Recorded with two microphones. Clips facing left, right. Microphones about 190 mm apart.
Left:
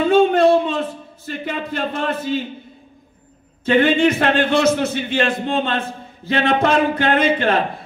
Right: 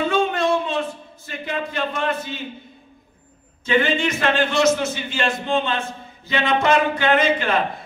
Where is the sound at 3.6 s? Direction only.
60° left (ahead or behind).